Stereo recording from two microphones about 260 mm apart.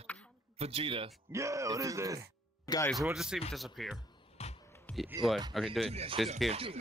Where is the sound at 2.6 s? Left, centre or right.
Centre.